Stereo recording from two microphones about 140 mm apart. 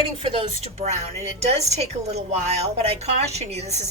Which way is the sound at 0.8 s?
50° right (ahead or behind).